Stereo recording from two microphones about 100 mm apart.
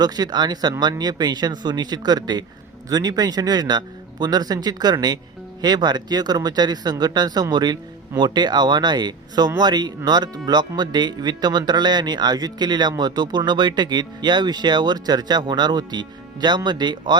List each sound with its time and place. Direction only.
0.0 s speech: 40° right (ahead or behind)